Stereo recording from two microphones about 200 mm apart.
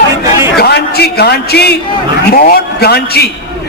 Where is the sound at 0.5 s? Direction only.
55° left (ahead or behind).